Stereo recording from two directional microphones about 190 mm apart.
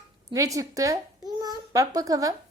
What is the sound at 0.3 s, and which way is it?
A child's voice, 15° right (ahead or behind).